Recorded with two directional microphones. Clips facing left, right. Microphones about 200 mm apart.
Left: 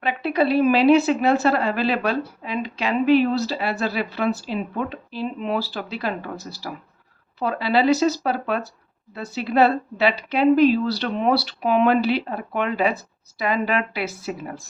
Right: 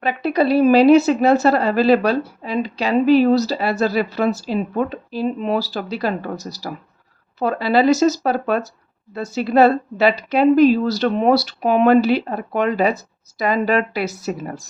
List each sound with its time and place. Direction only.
0.0 s speech: 40° right (ahead or behind)